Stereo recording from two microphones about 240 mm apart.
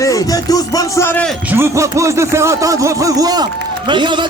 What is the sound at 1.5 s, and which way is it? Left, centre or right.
Music, centre.